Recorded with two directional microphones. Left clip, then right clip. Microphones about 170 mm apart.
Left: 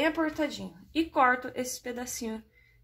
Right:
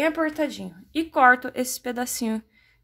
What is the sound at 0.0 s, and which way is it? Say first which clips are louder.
A woman's voice: right 5 dB; 40° right (ahead or behind).